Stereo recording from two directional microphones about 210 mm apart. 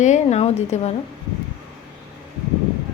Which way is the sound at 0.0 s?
35° left (ahead or behind).